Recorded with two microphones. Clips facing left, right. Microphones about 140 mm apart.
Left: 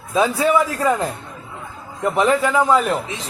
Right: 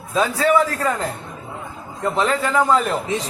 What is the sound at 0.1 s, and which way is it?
Speech, 15° left (ahead or behind).